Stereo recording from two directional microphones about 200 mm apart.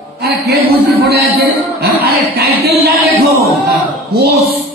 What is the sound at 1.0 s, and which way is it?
Speech, 50° right (ahead or behind).